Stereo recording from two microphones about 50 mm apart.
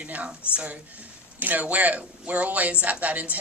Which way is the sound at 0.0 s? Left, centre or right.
Right.